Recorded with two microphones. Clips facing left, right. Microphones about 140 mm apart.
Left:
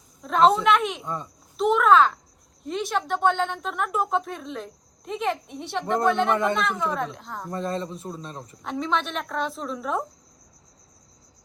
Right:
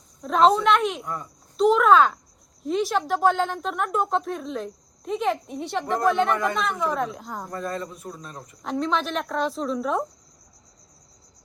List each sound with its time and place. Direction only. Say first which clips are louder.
0.2 s a woman's voice: even; centre (ahead or behind)
1.0 s speech: left 1 dB; 25° left (ahead or behind)
1.5 s a woman's voice: right 1 dB; centre (ahead or behind)
7.5 s speech: left 3 dB; 25° left (ahead or behind)
8.6 s a woman's voice: right 2 dB; centre (ahead or behind)